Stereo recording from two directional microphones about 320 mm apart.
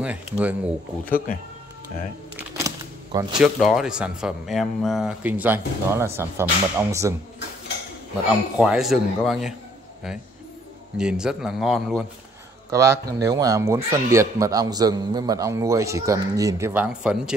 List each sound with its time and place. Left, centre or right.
0.0 s speech: centre
1.0 s speech: left
2.3 s a sound: centre
3.3 s speech: centre
8.5 s speech: centre
11.0 s a man's voice: centre